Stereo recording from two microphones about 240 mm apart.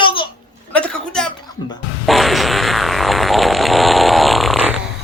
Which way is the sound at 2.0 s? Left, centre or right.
Centre.